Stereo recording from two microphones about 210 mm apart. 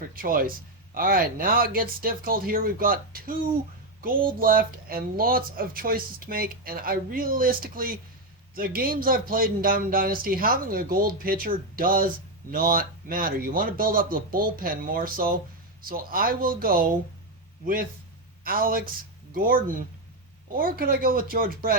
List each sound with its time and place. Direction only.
0.1 s speech: 45° right (ahead or behind)
18.4 s speech: 45° right (ahead or behind)